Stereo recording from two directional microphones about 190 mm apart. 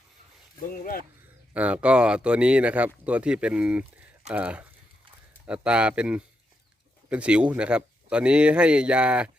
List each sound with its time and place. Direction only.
0.6 s speech: 45° left (ahead or behind)
1.5 s speech: 5° right (ahead or behind)